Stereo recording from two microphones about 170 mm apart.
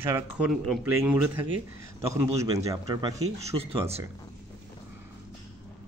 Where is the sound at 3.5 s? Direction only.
35° right (ahead or behind).